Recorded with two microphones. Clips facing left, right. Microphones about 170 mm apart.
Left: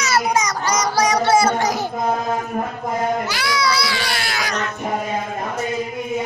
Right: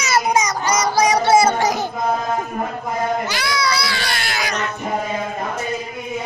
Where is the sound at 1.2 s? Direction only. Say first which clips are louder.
Right 2 dB; 20° right (ahead or behind).